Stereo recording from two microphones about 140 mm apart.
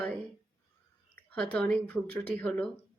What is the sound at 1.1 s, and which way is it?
A woman's voice, 10° left (ahead or behind).